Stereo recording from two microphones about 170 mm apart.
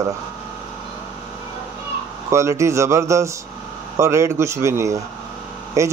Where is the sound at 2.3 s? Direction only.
15° right (ahead or behind).